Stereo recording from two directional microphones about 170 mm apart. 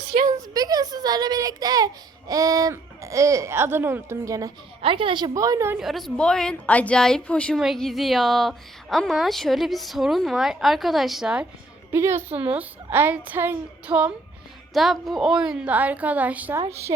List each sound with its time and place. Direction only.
0.3 s a child's voice: 20° right (ahead or behind)
4.8 s a woman's voice: 30° right (ahead or behind)
5.8 s a woman's voice: centre (ahead or behind)
11.9 s a woman's voice: 15° right (ahead or behind)